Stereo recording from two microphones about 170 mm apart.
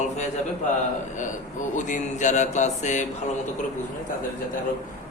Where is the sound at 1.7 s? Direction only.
45° left (ahead or behind).